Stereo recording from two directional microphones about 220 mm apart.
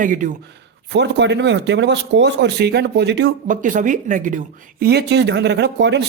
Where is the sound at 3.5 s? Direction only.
35° right (ahead or behind).